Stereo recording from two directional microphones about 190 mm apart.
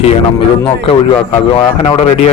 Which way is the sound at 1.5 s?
30° left (ahead or behind).